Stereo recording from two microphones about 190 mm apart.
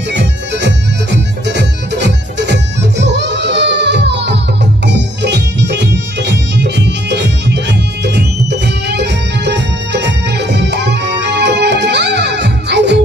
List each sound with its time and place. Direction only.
0.1 s music: 65° right (ahead or behind)